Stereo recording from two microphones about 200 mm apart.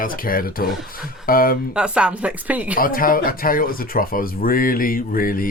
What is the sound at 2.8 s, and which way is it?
Speech, 45° left (ahead or behind).